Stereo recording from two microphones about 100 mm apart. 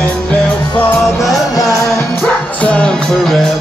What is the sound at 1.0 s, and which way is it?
Music, centre (ahead or behind).